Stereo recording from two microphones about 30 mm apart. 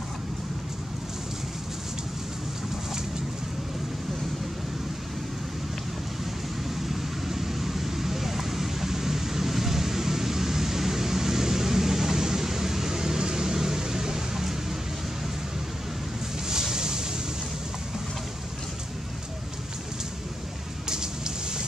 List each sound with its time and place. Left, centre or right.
6.7 s vehicle: centre
16.4 s boat: right
20.9 s a sound: right